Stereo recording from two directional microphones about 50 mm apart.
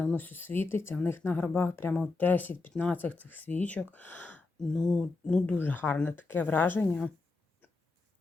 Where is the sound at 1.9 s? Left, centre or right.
Left.